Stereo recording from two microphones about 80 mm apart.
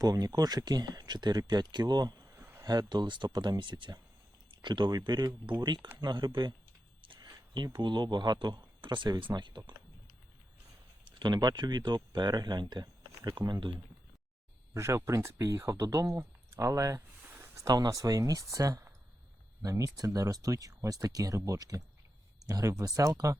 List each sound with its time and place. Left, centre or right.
0.0 s speech: right
2.2 s a sound: right
2.6 s speech: right
4.6 s speech: right
5.6 s speech: right
6.0 s speech: right
7.5 s speech: right
11.0 s speech: right
14.7 s speech: right
17.2 s a sound: right
17.5 s speech: right